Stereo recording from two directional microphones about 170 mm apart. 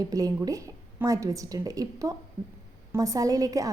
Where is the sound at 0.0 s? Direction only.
20° right (ahead or behind).